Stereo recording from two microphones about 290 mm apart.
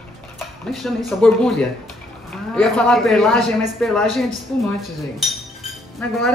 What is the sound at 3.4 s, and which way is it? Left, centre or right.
Speech, right.